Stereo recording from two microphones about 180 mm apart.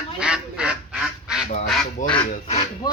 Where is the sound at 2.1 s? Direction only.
30° left (ahead or behind).